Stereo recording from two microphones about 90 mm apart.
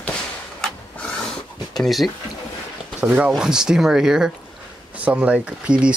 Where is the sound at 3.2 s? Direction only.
10° right (ahead or behind).